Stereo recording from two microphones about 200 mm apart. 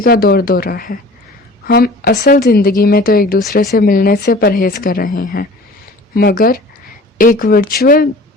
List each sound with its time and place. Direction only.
0.0 s speech: 45° left (ahead or behind)